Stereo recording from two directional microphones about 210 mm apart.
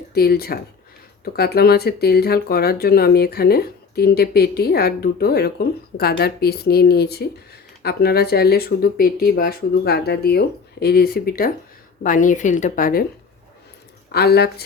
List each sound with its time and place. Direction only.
0.1 s a woman's voice: 45° left (ahead or behind)
14.1 s speech: 50° left (ahead or behind)